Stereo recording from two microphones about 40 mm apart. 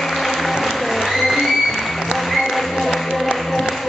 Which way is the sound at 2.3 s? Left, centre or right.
Centre.